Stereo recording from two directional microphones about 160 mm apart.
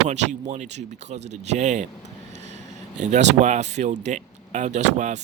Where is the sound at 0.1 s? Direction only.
45° right (ahead or behind).